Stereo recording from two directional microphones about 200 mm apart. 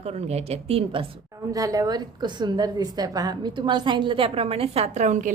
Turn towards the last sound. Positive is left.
turn(degrees=-35)  # may be behind; listen again after turning